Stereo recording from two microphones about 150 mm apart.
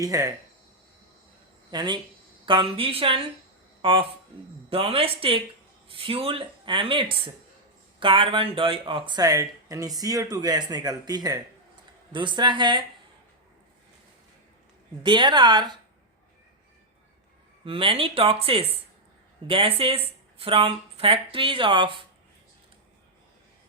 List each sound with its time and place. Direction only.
0.0 s speech: 20° right (ahead or behind)
1.7 s speech: 30° right (ahead or behind)
15.0 s speech: 30° right (ahead or behind)
17.7 s speech: 35° right (ahead or behind)